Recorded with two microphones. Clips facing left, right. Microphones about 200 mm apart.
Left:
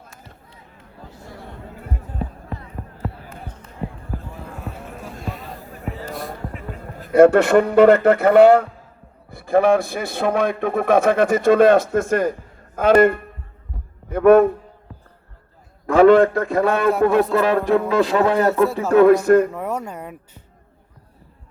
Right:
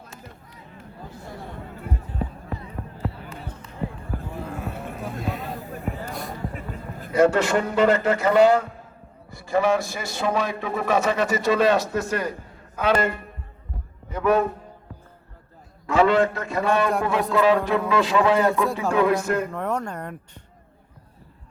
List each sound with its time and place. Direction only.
5.2 s a sound: centre (ahead or behind)
7.1 s a man's voice: 60° left (ahead or behind)
15.9 s a man's voice: 55° left (ahead or behind)
18.6 s a man's voice: centre (ahead or behind)
18.9 s a man's voice: 55° left (ahead or behind)
19.5 s speech: 10° left (ahead or behind)